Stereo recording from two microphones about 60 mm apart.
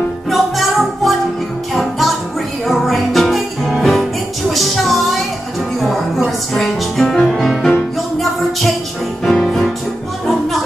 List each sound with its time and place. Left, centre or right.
0.3 s music: centre